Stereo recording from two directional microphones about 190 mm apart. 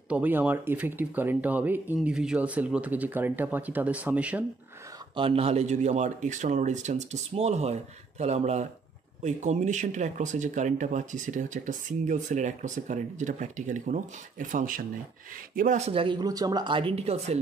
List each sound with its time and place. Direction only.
0.1 s speech: 10° right (ahead or behind)
5.1 s speech: 30° right (ahead or behind)